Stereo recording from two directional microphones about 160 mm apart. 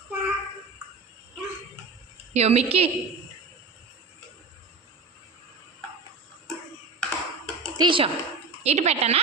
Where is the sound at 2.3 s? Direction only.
40° right (ahead or behind).